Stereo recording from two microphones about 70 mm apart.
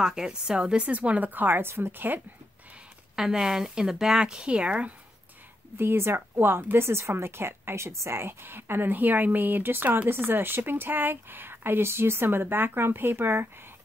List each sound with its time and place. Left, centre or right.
0.0 s a woman's voice: centre; by 2.2 s right
3.2 s speech: centre
5.8 s speech: right